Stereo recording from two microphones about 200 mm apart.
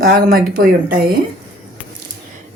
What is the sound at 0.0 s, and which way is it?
A woman's voice, 50° right (ahead or behind).